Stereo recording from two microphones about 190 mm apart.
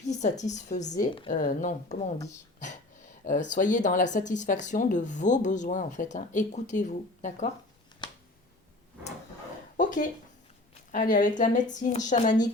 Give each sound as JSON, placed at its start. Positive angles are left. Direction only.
{"t": 0.0, "sound": "a woman's voice", "side_deg": 40}
{"t": 3.2, "sound": "speech", "side_deg": 45}
{"t": 9.7, "sound": "a sound", "side_deg": 45}
{"t": 10.9, "sound": "speech", "side_deg": 45}